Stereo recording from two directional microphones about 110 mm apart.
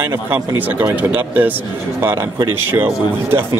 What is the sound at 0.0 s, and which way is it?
Speech, 20° right (ahead or behind).